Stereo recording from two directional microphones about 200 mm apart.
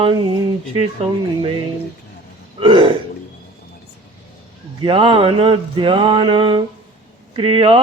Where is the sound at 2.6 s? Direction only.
25° right (ahead or behind).